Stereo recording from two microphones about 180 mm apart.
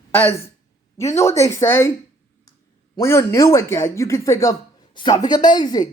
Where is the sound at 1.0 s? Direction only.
15° left (ahead or behind).